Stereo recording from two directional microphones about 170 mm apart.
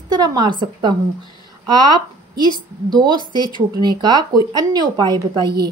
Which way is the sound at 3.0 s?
25° right (ahead or behind).